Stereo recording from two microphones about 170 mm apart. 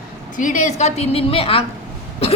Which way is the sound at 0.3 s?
45° left (ahead or behind).